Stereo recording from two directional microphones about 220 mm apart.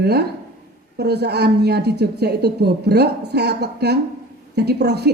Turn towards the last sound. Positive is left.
turn(degrees=-50)  # may be behind; listen again after turning